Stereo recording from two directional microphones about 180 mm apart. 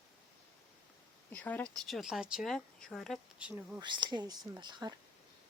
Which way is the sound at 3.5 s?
10° right (ahead or behind).